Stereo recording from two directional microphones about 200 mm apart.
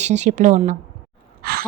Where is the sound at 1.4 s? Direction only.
50° right (ahead or behind).